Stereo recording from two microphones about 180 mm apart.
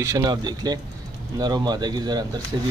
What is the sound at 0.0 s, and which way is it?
Speech, 20° right (ahead or behind).